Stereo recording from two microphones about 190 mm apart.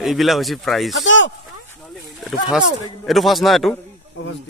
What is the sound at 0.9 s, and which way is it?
Speech, 80° left.